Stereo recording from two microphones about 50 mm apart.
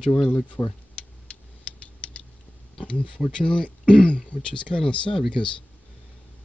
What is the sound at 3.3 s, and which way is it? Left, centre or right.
Speech, centre.